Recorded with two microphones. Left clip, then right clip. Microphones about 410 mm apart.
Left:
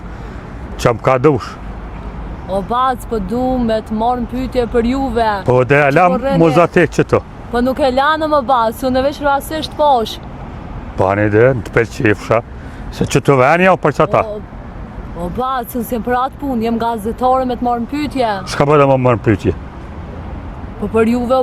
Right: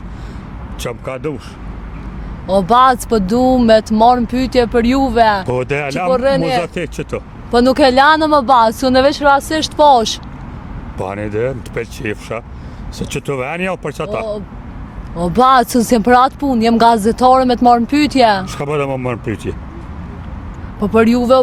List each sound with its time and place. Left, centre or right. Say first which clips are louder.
1.0 s speech: left 13 dB; left
2.5 s speech: right 6 dB; right
5.5 s speech: left 7 dB; centre
6.1 s speech: right 3 dB; right
6.6 s speech: left 9 dB; left
7.5 s speech: right 4 dB; right
9.0 s speech: right 5 dB; right
10.9 s speech: left 8 dB; left
15.2 s speech: right 9 dB; right
18.4 s speech: left 8 dB; left
20.9 s speech: right 3 dB; right